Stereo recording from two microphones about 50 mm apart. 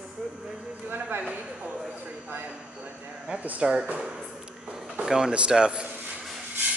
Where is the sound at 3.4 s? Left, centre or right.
Right.